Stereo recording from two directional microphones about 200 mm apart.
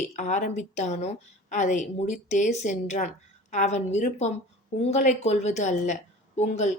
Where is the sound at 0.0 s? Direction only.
35° left (ahead or behind).